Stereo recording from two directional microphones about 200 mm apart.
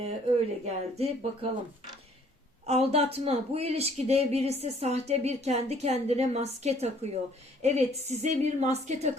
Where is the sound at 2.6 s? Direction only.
30° right (ahead or behind).